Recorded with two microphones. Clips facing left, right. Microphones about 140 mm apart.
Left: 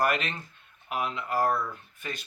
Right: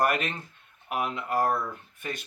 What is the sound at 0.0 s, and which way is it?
Speech, 50° right (ahead or behind).